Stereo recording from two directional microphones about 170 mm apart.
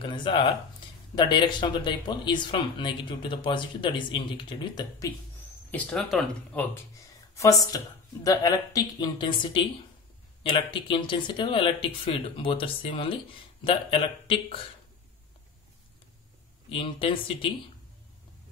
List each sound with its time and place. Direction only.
0.0 s speech: 30° left (ahead or behind)
5.7 s speech: 5° left (ahead or behind)
7.3 s speech: 20° left (ahead or behind)
16.6 s speech: 30° left (ahead or behind)